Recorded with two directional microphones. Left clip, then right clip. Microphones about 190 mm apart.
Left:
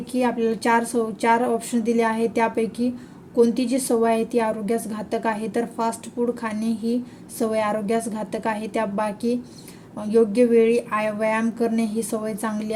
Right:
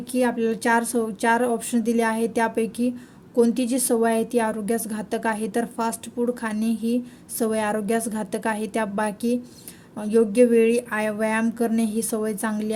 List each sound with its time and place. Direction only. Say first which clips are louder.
0.1 s a woman's voice: even; 30° right (ahead or behind)